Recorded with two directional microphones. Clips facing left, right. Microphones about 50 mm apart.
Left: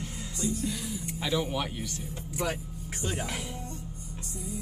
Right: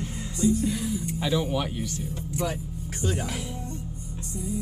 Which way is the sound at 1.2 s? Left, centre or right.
Centre.